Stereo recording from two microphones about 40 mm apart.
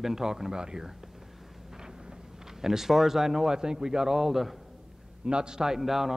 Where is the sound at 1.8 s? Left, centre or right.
Centre.